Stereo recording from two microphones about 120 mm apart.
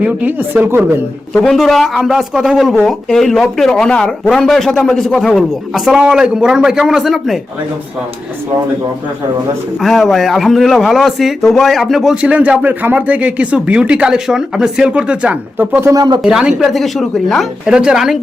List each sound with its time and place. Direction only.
0.0 s a man's voice: 15° right (ahead or behind)
1.3 s a man's voice: centre (ahead or behind)
9.8 s a man's voice: centre (ahead or behind)
15.9 s speech: 35° right (ahead or behind)
16.2 s a man's voice: 5° right (ahead or behind)